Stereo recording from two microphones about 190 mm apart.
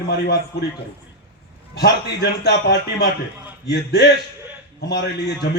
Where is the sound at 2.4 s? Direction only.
60° left (ahead or behind).